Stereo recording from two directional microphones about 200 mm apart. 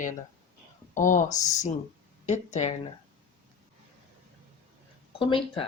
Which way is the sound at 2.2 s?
35° left (ahead or behind).